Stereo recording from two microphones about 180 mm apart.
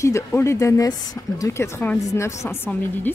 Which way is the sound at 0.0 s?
15° left (ahead or behind).